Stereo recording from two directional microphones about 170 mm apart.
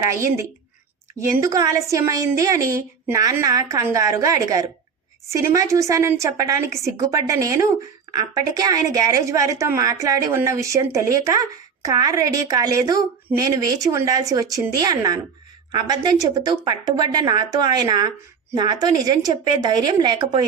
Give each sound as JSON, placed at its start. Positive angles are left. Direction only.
{"t": 0.0, "sound": "a woman's voice", "side_deg": -15}